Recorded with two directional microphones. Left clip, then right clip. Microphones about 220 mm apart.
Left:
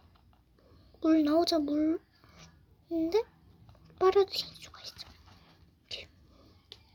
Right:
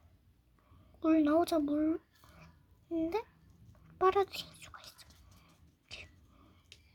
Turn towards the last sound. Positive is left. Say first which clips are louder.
# left 7 dB
turn(degrees=-30)  # may be behind; listen again after turning